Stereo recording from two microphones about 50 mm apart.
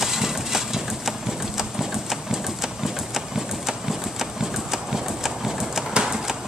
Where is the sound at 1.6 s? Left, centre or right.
Centre.